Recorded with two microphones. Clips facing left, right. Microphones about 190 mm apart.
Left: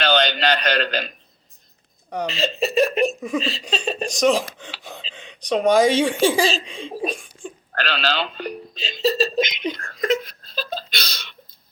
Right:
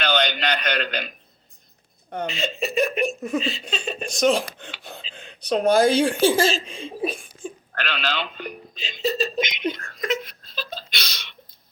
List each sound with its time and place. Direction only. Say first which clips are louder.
0.0 s a man's voice: left 3 dB; 35° left (ahead or behind)
2.3 s a man's voice: left 5 dB; 35° left (ahead or behind)
3.2 s speech: left 1 dB; centre (ahead or behind)
3.7 s a man's voice: left 4 dB; 35° left (ahead or behind)
4.1 s speech: left 1 dB; centre (ahead or behind)
5.1 s a sound: left 1 dB; centre (ahead or behind)
5.5 s speech: left 1 dB; centre (ahead or behind)
7.8 s a man's voice: left 4 dB; 35° left (ahead or behind)
9.7 s a sound: left 5 dB; 40° left (ahead or behind)